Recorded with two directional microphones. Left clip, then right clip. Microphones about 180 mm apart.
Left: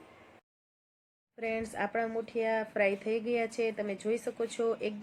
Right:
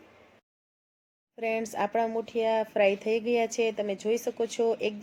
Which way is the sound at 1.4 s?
30° right (ahead or behind).